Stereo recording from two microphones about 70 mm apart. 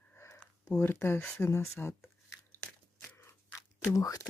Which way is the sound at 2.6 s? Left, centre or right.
Left.